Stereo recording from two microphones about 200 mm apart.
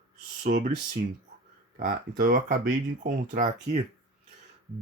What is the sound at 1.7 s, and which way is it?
Speech, 45° right (ahead or behind).